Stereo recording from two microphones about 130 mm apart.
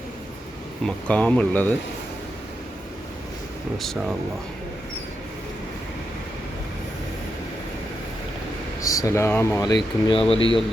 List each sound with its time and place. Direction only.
0.9 s speech: 10° left (ahead or behind)
8.8 s speech: 25° left (ahead or behind)
10.1 s speech: 45° left (ahead or behind)